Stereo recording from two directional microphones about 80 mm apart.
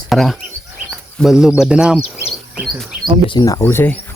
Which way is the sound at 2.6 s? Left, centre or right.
Centre.